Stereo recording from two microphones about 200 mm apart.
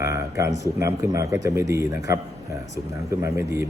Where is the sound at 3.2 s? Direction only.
15° right (ahead or behind).